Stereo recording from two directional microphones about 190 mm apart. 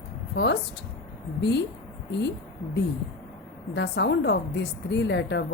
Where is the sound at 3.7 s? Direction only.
65° left (ahead or behind).